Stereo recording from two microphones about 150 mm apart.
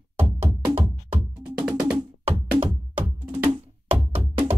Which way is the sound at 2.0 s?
35° right (ahead or behind).